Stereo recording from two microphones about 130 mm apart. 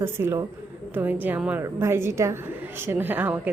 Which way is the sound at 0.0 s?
20° right (ahead or behind).